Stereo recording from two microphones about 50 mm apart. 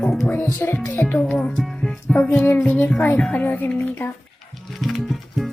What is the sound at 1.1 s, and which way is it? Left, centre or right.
Speech, left.